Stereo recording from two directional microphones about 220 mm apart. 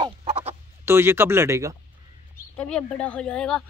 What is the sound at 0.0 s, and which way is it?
Chicken, 25° right (ahead or behind).